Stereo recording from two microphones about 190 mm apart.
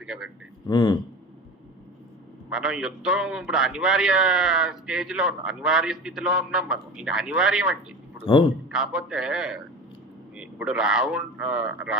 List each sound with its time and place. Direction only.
0.0 s a sound: 5° right (ahead or behind)
0.7 s a man's voice: 25° left (ahead or behind)
2.5 s a man's voice: 5° right (ahead or behind)
8.2 s a man's voice: 30° left (ahead or behind)
8.7 s a man's voice: 5° right (ahead or behind)